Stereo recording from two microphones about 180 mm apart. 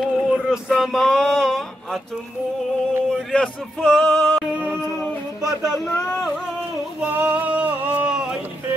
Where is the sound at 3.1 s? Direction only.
5° left (ahead or behind).